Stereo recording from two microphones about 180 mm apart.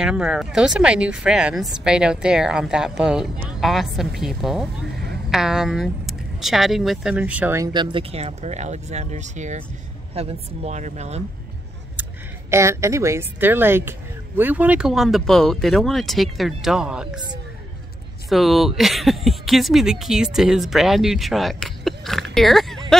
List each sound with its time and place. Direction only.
0.0 s a woman's voice: 5° right (ahead or behind); by 11.2 s 40° right (ahead or behind)
12.0 s speech: 15° right (ahead or behind)
18.3 s speech: centre (ahead or behind)